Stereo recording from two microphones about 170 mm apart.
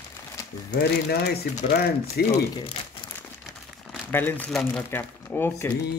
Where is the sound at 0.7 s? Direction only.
70° left (ahead or behind).